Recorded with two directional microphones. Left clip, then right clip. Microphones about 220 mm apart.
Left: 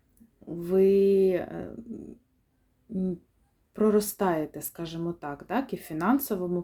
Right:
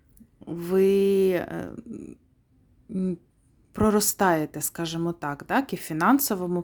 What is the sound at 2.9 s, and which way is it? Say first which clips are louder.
Speech: right 2 dB; 25° right (ahead or behind).